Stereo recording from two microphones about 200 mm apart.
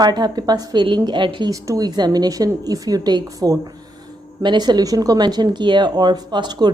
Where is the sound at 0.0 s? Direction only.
20° right (ahead or behind).